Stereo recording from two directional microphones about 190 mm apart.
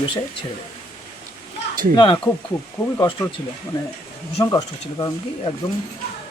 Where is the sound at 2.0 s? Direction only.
20° left (ahead or behind).